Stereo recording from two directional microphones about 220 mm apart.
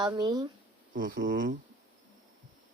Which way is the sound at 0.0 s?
20° right (ahead or behind).